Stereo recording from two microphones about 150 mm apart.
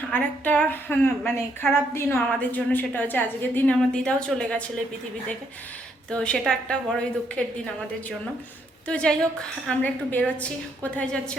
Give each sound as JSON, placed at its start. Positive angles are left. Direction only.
{"t": 0.1, "sound": "a woman's voice", "side_deg": 10}
{"t": 6.1, "sound": "a woman's voice", "side_deg": 5}
{"t": 8.9, "sound": "a woman's voice", "side_deg": 5}